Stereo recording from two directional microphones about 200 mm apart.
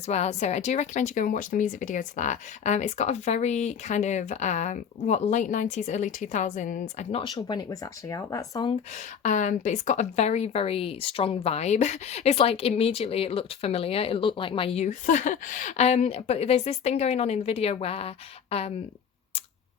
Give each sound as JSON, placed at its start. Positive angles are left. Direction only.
{"t": 0.1, "sound": "speech", "side_deg": 35}
{"t": 9.2, "sound": "speech", "side_deg": 40}